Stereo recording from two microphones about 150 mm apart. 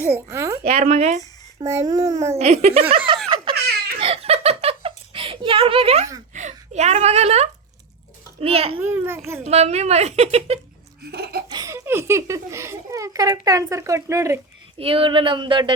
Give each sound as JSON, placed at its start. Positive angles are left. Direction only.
{"t": 0.0, "sound": "speech", "side_deg": -15}
{"t": 0.7, "sound": "a woman's voice", "side_deg": -45}
{"t": 1.5, "sound": "speech", "side_deg": -20}
{"t": 2.3, "sound": "a woman's voice", "side_deg": -45}
{"t": 3.2, "sound": "a sound", "side_deg": -30}
{"t": 6.3, "sound": "speech", "side_deg": -50}
{"t": 8.4, "sound": "a sound", "side_deg": -40}
{"t": 8.8, "sound": "a child's voice", "side_deg": -15}
{"t": 9.5, "sound": "a woman's voice", "side_deg": -45}
{"t": 11.0, "sound": "laughter", "side_deg": -90}
{"t": 11.4, "sound": "speech", "side_deg": -25}
{"t": 14.8, "sound": "a sound", "side_deg": -40}